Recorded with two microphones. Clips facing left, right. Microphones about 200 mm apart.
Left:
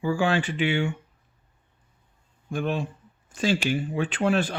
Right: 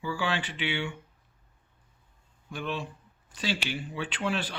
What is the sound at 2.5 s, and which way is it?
Speech, 50° left (ahead or behind).